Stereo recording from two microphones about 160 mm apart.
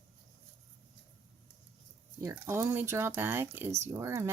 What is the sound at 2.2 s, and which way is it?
Speech, 15° right (ahead or behind).